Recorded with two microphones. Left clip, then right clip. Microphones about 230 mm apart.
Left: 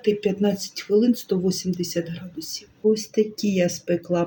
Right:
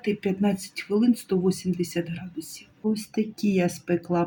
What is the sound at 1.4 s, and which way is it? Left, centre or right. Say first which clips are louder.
Speech: left 1 dB; centre.